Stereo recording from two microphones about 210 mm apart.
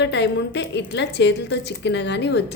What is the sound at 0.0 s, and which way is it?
A woman's voice, 55° left (ahead or behind).